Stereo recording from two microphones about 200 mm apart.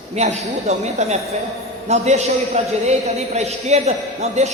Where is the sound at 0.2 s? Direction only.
35° right (ahead or behind).